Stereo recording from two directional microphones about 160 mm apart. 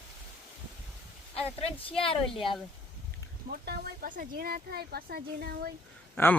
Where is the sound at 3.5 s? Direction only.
70° right (ahead or behind).